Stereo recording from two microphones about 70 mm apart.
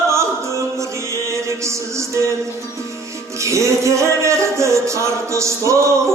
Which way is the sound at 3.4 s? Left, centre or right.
Right.